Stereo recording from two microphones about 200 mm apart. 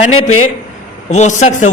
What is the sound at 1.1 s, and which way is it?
Speech, 35° left (ahead or behind).